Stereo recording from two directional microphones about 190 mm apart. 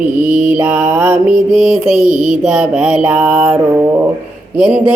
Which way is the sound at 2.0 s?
40° right (ahead or behind).